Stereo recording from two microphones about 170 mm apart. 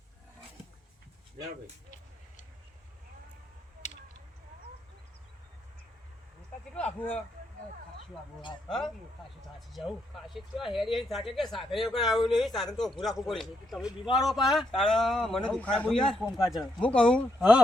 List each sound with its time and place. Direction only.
3.8 s a sound: 45° left (ahead or behind)
6.7 s speech: 10° left (ahead or behind)
9.6 s a man's voice: centre (ahead or behind)